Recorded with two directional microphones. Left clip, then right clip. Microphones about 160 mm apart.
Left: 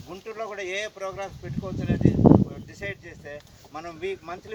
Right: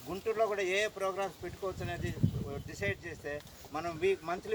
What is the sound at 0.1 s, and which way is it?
Speech, centre (ahead or behind).